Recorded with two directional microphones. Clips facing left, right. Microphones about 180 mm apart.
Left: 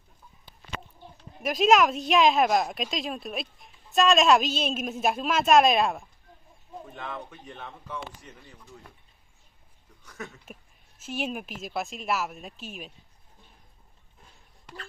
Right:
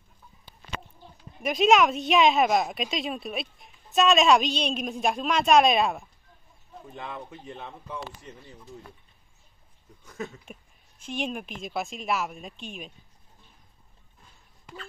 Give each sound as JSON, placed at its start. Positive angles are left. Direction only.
{"t": 1.4, "sound": "a woman's voice", "side_deg": 0}
{"t": 7.0, "sound": "speech", "side_deg": -20}
{"t": 10.0, "sound": "speech", "side_deg": -20}
{"t": 10.4, "sound": "a woman's voice", "side_deg": 5}